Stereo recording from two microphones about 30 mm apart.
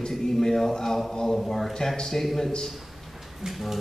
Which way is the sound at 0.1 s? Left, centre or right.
Centre.